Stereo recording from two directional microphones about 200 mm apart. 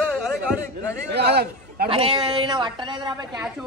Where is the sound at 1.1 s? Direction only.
55° right (ahead or behind).